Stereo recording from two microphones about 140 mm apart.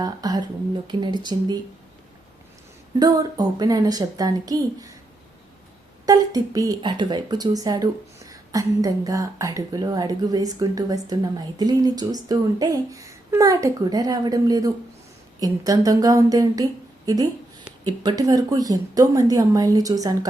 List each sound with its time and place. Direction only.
0.0 s speech: 30° right (ahead or behind)
3.0 s speech: 25° right (ahead or behind)
6.1 s speech: 25° right (ahead or behind)
17.8 s speech: 30° right (ahead or behind)